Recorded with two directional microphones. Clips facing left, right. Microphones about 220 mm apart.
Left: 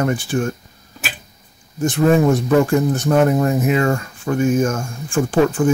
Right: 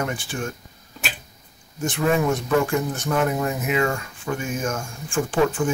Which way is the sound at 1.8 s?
40° left (ahead or behind).